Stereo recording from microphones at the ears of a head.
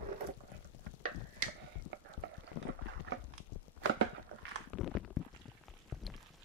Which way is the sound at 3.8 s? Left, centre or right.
Right.